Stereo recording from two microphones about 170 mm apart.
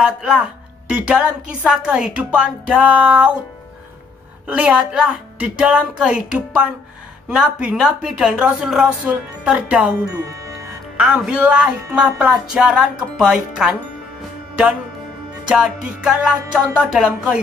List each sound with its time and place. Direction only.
0.0 s a woman's voice: 5° right (ahead or behind)
4.5 s a woman's voice: 5° right (ahead or behind)
10.1 s speech: 15° right (ahead or behind)
11.0 s speech: 5° right (ahead or behind)
15.5 s speech: 5° right (ahead or behind)